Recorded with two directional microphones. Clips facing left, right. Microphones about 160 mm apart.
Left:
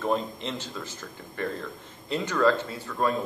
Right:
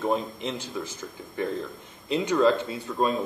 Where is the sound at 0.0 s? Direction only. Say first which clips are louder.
Right 1 dB; 15° right (ahead or behind).